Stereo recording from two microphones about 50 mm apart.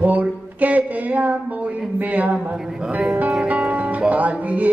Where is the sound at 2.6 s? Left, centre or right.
Centre.